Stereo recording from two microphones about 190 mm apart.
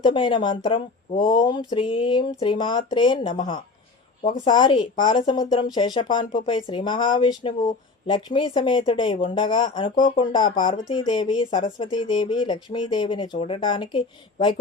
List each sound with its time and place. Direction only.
0.0 s speech: 25° left (ahead or behind)